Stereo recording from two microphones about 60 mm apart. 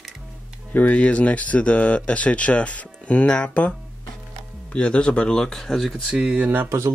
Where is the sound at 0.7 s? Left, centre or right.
Left.